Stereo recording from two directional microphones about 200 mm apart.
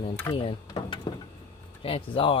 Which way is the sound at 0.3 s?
25° left (ahead or behind).